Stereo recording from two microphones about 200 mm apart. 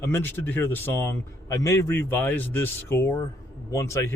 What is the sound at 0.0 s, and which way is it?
Speech, 10° left (ahead or behind).